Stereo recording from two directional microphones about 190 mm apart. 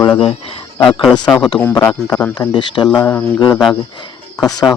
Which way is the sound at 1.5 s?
15° left (ahead or behind).